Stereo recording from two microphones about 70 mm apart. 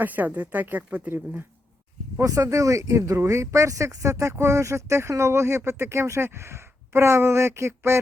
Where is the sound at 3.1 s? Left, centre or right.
Right.